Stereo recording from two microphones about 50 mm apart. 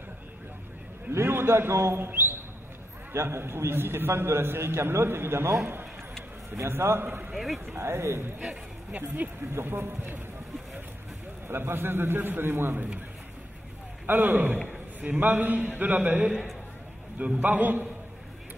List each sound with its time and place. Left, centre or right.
1.1 s a man's voice: right
3.1 s a man's voice: right
6.5 s a man's voice: right
7.3 s speech: centre
7.7 s a man's voice: right
8.9 s a man's voice: right
9.5 s a man's voice: right
11.4 s a man's voice: right
14.0 s a man's voice: right